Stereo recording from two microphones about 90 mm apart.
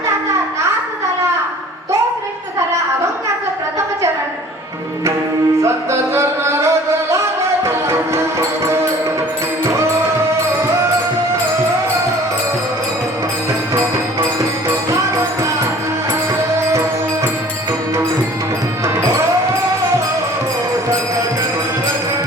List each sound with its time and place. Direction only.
5.6 s music: 30° right (ahead or behind)
9.6 s music: 30° right (ahead or behind)
14.8 s music: 30° right (ahead or behind)